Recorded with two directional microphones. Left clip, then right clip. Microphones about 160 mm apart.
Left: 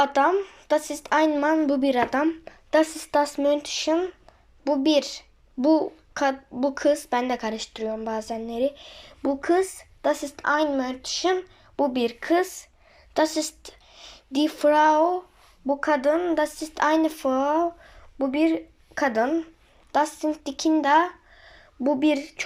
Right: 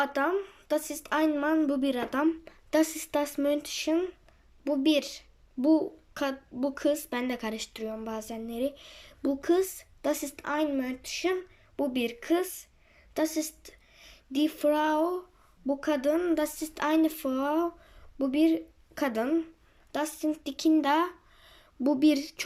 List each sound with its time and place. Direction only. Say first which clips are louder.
0.0 s a woman's voice: left 8 dB; 10° right (ahead or behind); by 22.4 s 30° right (ahead or behind)